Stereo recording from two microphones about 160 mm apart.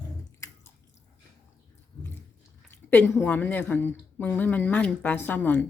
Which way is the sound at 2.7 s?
15° left (ahead or behind).